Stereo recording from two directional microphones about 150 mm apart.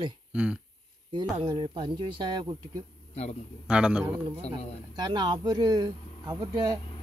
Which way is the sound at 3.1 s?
45° left (ahead or behind).